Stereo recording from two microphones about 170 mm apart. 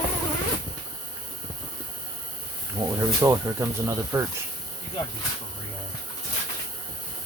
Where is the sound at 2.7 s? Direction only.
20° right (ahead or behind).